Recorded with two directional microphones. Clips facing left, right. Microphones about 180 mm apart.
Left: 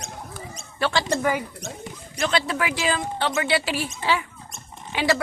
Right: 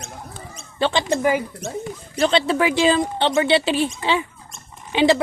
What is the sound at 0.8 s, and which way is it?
Speech, 20° right (ahead or behind).